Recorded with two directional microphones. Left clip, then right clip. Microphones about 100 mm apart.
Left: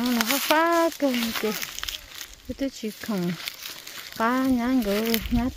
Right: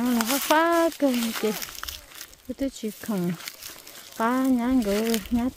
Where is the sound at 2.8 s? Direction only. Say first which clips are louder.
Even; 35° right (ahead or behind).